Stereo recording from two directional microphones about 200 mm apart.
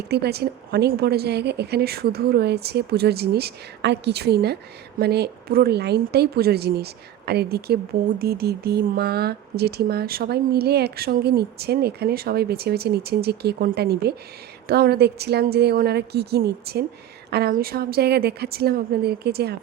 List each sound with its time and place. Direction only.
0.1 s a woman's voice: 55° right (ahead or behind)